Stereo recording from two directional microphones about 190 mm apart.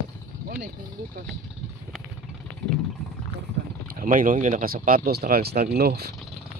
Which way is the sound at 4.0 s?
45° right (ahead or behind).